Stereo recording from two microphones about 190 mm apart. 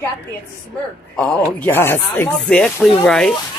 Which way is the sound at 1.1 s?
10° left (ahead or behind).